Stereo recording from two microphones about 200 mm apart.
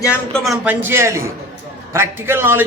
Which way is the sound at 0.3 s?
Centre (ahead or behind).